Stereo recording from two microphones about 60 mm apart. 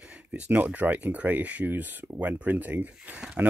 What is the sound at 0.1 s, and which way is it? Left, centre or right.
Speech, right.